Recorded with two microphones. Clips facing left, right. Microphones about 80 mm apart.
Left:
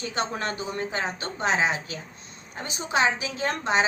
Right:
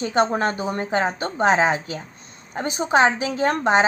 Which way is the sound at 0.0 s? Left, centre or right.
Right.